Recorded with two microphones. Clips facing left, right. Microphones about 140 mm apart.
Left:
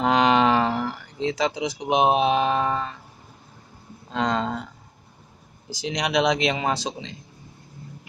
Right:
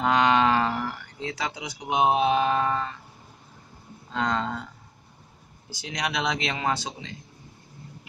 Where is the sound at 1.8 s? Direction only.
20° left (ahead or behind).